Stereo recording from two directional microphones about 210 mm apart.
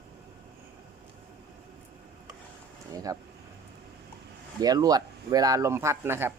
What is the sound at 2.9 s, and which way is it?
Speech, 15° right (ahead or behind).